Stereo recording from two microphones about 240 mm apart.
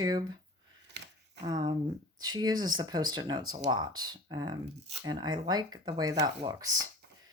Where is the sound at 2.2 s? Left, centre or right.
Centre.